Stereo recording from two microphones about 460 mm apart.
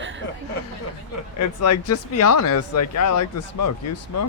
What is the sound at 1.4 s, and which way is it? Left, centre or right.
Speech, left.